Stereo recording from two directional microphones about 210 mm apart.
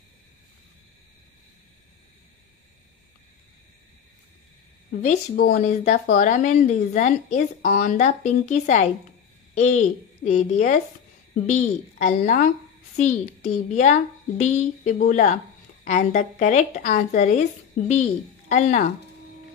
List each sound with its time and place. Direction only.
5.0 s speech: 40° left (ahead or behind)
12.0 s speech: 35° left (ahead or behind)